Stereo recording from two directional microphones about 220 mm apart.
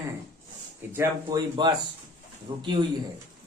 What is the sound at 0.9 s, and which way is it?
Speech, 20° right (ahead or behind).